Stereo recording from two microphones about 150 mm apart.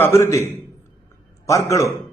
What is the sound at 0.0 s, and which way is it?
A man's voice, 20° left (ahead or behind).